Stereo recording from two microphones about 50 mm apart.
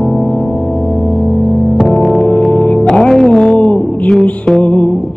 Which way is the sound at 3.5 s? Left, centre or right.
Left.